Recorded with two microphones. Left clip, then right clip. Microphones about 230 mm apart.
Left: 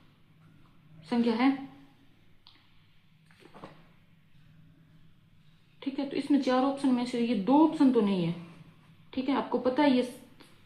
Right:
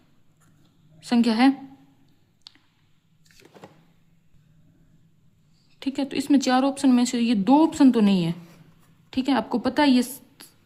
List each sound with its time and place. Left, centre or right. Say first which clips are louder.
1.0 s speech: right 7 dB; right
5.8 s a woman's voice: right 6 dB; right